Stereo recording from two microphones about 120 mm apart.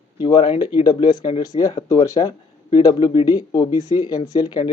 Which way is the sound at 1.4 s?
30° left (ahead or behind).